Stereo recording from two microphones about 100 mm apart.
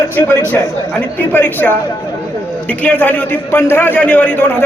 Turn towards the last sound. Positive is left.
turn(degrees=15)  # may be behind; listen again after turning